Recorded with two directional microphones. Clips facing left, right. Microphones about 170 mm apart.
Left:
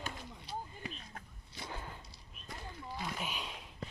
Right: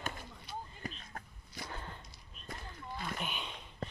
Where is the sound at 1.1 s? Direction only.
45° right (ahead or behind).